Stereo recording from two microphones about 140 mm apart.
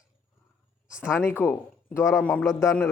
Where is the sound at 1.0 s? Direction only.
15° left (ahead or behind).